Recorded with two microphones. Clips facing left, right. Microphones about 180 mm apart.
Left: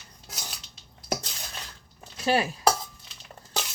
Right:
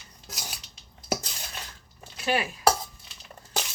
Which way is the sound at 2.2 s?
35° left (ahead or behind).